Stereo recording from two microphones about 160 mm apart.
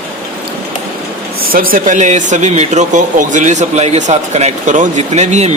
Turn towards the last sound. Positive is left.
turn(degrees=-45)  # may be behind; listen again after turning